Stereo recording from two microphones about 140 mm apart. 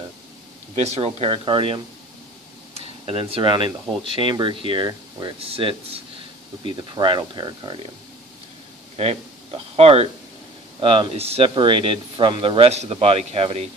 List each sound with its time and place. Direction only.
0.7 s speech: 50° right (ahead or behind)
3.1 s speech: 40° right (ahead or behind)
8.9 s speech: 45° right (ahead or behind)